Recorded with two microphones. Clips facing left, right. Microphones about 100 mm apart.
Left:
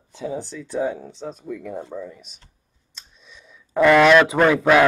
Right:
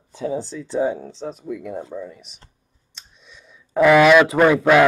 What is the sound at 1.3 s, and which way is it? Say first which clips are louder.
Speech: right 1 dB; 5° right (ahead or behind).